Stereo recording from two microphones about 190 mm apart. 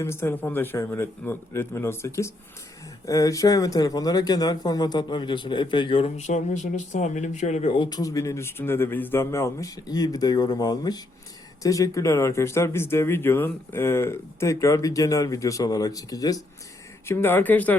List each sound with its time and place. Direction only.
0.0 s a man's voice: 15° left (ahead or behind)